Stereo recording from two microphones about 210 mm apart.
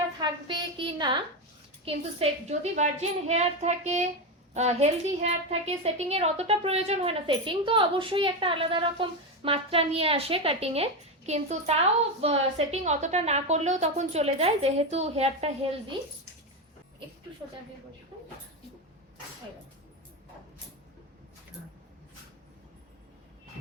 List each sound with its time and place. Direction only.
0.2 s a woman's voice: 20° right (ahead or behind)